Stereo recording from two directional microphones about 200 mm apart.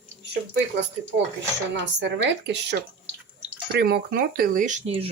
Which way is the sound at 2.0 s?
60° right (ahead or behind).